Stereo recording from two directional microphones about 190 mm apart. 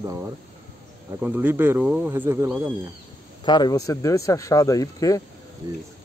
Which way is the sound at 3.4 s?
20° left (ahead or behind).